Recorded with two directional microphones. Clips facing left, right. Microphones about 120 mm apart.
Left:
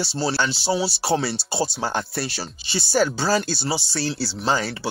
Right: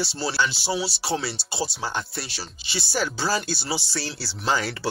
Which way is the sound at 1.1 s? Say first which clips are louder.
Left 3 dB; 55° left (ahead or behind).